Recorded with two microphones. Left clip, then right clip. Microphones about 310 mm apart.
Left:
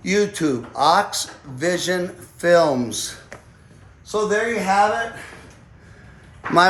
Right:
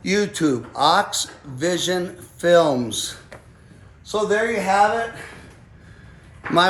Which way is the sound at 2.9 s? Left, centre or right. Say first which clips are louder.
Right 1 dB; centre.